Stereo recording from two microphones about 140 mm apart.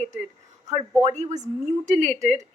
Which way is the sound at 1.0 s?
55° right (ahead or behind).